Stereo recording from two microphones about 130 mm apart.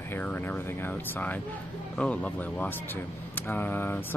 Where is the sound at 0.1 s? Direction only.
15° left (ahead or behind).